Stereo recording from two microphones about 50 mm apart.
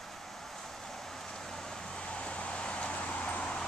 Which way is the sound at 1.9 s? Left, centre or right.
Left.